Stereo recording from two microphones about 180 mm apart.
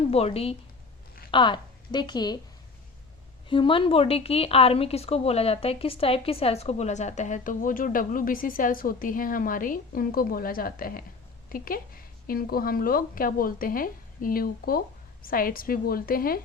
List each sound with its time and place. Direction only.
0.0 s a woman's voice: 35° left (ahead or behind)
3.5 s a woman's voice: 30° left (ahead or behind); by 16.4 s 55° left (ahead or behind)